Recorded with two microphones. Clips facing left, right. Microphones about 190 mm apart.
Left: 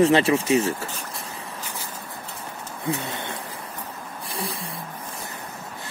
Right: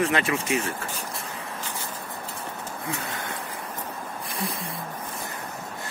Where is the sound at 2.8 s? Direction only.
30° left (ahead or behind).